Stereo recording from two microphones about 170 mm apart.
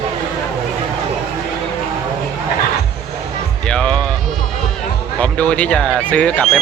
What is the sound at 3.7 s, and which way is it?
Music, 5° left (ahead or behind).